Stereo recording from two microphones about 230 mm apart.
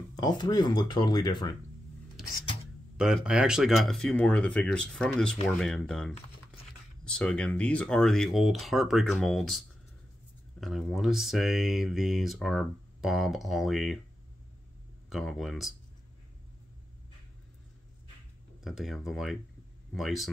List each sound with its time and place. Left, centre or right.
0.1 s speech: centre
3.0 s speech: centre
15.0 s speech: centre
18.6 s speech: centre